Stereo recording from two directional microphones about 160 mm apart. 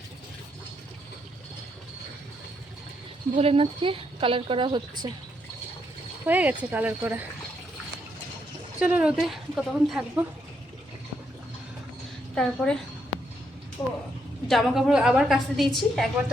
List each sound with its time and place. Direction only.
3.3 s a woman's voice: 35° right (ahead or behind)
6.2 s a woman's voice: 10° right (ahead or behind)
8.8 s a woman's voice: 5° right (ahead or behind)
12.3 s a woman's voice: 5° left (ahead or behind)
14.4 s a woman's voice: centre (ahead or behind)